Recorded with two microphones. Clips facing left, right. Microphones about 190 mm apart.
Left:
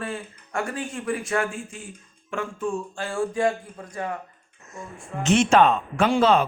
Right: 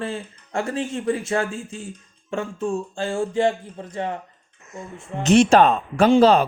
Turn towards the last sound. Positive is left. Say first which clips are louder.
# right 5 dB
turn(degrees=-35)  # may be behind; listen again after turning